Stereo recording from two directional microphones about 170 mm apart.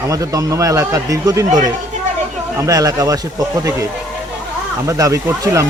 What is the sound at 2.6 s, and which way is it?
Speech, 20° right (ahead or behind).